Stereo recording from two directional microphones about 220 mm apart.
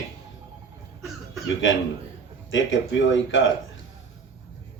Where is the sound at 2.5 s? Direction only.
60° left (ahead or behind).